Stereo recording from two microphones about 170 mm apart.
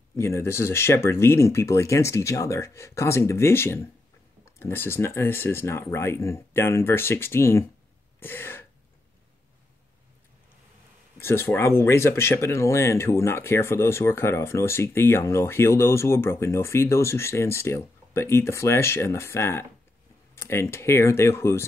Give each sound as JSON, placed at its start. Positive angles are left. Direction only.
{"t": 0.1, "sound": "speech", "side_deg": 15}
{"t": 8.2, "sound": "a sound", "side_deg": 10}
{"t": 11.1, "sound": "speech", "side_deg": 15}